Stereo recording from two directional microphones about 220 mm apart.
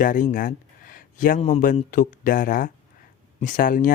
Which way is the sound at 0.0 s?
35° left (ahead or behind).